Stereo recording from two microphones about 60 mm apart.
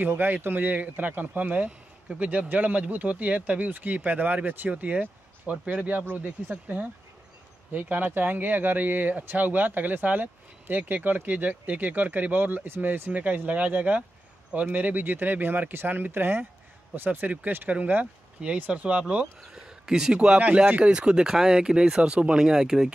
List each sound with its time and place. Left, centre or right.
0.0 s speech: right
7.7 s speech: right
19.4 s speech: centre